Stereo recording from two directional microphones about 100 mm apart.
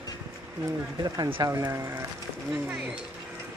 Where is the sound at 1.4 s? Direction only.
30° right (ahead or behind).